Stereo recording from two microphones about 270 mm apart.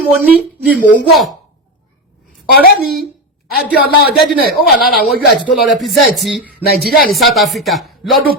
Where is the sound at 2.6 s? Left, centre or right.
Left.